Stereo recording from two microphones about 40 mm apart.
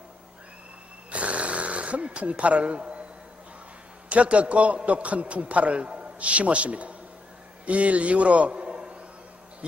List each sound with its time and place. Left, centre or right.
1.1 s snoring: right
4.1 s a man's voice: right